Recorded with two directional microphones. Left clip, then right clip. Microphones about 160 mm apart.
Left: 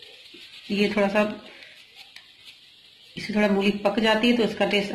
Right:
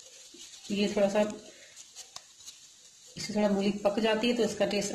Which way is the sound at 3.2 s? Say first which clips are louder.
Left 6 dB; 30° right (ahead or behind).